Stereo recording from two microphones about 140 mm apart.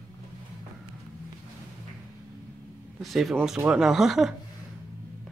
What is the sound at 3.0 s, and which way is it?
Speech, centre (ahead or behind).